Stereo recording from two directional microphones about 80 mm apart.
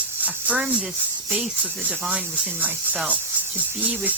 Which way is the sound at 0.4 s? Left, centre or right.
Centre.